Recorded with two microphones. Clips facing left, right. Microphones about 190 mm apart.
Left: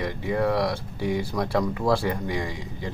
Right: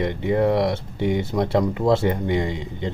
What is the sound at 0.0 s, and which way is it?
Speech, 25° right (ahead or behind).